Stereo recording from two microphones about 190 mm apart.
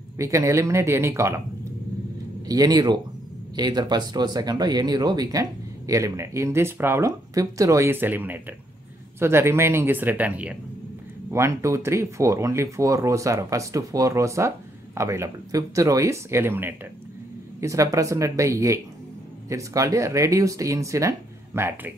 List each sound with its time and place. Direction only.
0.2 s speech: 15° right (ahead or behind)
2.4 s speech: 20° right (ahead or behind)